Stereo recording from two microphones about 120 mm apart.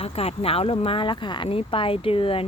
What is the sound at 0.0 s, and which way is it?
Speech, 55° left (ahead or behind).